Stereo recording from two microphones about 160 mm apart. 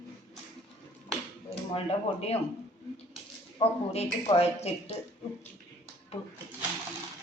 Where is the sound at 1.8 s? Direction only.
40° left (ahead or behind).